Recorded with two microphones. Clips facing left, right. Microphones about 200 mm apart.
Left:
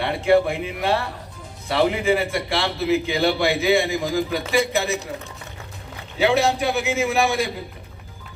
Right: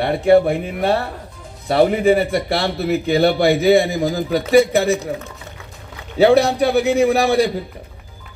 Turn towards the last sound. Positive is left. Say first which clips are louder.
# right 6 dB
turn(degrees=-35)  # may be behind; listen again after turning